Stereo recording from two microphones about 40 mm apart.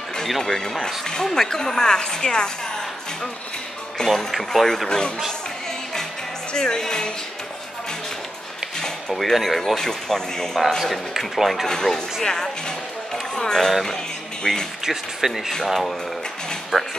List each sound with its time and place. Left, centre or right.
0.4 s speech: centre
4.0 s speech: centre
4.8 s speech: left
6.5 s speech: centre
8.8 s speech: centre
10.9 s speech: centre
11.6 s speech: centre
13.1 s a sound: centre
14.4 s speech: centre
14.9 s speech: centre
16.7 s speech: centre